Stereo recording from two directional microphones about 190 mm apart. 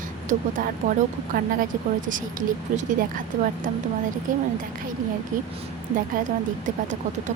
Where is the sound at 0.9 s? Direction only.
40° right (ahead or behind).